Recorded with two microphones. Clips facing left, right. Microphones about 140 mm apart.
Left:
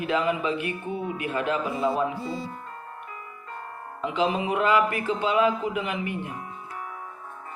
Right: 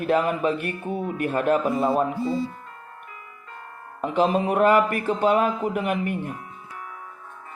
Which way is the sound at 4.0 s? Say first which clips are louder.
Right 4 dB; 45° right (ahead or behind).